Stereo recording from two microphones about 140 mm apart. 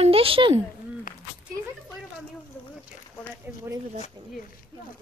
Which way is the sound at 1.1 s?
80° left.